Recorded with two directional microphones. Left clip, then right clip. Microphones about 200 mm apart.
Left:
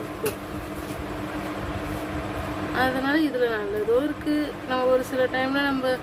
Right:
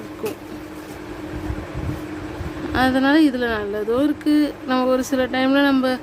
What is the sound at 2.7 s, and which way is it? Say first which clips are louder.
Speech: right 6 dB; 55° right (ahead or behind).